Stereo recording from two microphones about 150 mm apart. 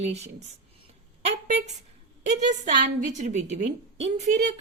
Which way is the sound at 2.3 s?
55° right (ahead or behind).